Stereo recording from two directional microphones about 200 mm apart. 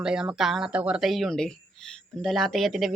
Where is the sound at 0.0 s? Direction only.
5° right (ahead or behind).